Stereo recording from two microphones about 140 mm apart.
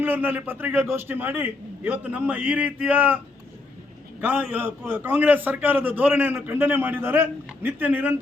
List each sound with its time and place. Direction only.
0.0 s a man's voice: 15° right (ahead or behind)
4.2 s a man's voice: 10° right (ahead or behind)